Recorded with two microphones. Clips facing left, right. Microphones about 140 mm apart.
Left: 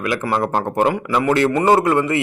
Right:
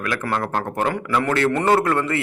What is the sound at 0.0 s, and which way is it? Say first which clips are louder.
A man's voice: left 4 dB; 15° left (ahead or behind).